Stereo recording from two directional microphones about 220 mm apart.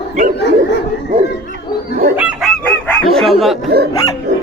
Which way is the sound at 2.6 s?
10° left (ahead or behind).